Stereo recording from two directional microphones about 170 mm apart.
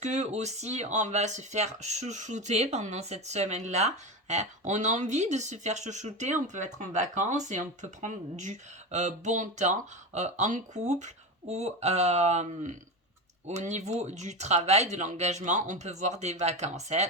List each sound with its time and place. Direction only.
0.0 s speech: 45° right (ahead or behind)